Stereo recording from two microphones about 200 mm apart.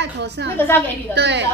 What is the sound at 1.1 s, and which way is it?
Speech, 60° right (ahead or behind).